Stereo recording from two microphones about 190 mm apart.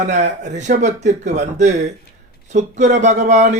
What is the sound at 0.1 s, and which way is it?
A man's voice, 40° right (ahead or behind).